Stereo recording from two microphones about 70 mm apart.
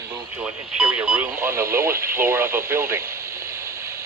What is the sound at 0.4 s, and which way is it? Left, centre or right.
Speech, centre.